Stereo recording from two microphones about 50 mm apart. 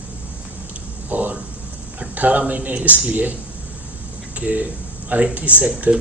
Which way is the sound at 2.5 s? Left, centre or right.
Right.